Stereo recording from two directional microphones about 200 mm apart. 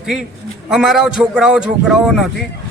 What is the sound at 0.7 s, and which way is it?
A man's voice, centre (ahead or behind).